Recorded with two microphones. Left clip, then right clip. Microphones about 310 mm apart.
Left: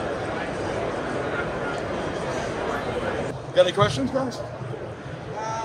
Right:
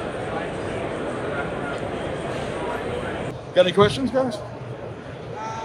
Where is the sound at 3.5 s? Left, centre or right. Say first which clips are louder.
Right 2 dB; right.